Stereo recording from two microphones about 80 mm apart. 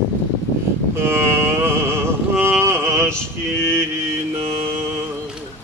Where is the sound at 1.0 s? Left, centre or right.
Right.